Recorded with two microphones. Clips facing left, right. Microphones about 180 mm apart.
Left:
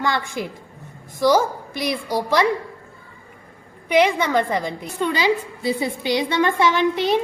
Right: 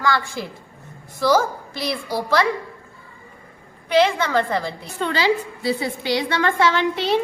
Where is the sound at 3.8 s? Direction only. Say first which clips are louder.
Even; 15° left (ahead or behind).